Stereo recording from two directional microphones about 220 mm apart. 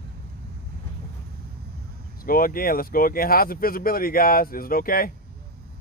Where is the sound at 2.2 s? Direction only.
40° left (ahead or behind).